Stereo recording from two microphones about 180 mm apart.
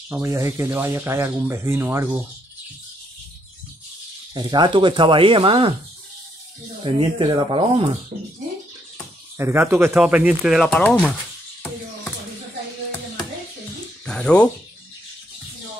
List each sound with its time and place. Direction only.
0.1 s speech: 15° right (ahead or behind)
4.3 s speech: 25° right (ahead or behind)
6.8 s speech: 30° right (ahead or behind)
9.4 s speech: 15° right (ahead or behind); by 11.1 s 5° left (ahead or behind)
14.0 s speech: 5° left (ahead or behind)